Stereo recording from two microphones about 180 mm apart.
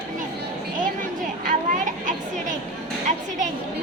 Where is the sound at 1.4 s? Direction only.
45° right (ahead or behind).